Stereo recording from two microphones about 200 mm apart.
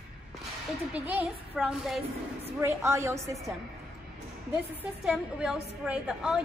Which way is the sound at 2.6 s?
15° right (ahead or behind).